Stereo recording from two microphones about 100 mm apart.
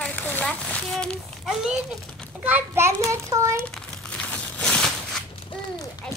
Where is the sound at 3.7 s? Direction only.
10° left (ahead or behind).